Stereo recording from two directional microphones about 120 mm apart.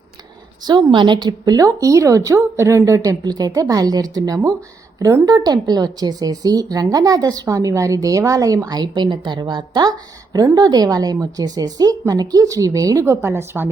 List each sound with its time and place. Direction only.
0.6 s a woman's voice: 35° right (ahead or behind); by 13.7 s 20° right (ahead or behind)